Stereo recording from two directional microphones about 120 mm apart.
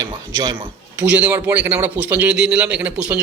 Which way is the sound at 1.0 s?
15° right (ahead or behind).